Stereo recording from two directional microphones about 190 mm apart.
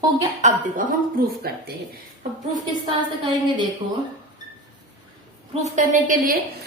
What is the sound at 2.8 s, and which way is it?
Speech, 25° right (ahead or behind).